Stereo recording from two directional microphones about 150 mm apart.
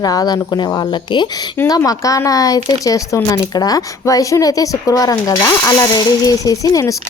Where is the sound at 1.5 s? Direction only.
20° left (ahead or behind).